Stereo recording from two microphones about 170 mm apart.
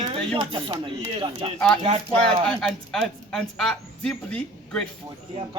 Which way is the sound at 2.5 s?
5° left (ahead or behind).